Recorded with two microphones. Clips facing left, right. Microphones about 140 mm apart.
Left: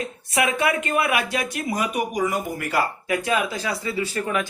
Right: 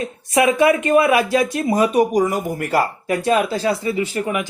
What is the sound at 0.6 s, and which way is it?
A man's voice, 30° right (ahead or behind).